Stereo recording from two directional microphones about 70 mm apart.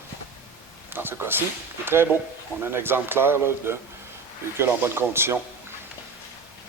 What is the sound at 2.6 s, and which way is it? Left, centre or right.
Speech, right.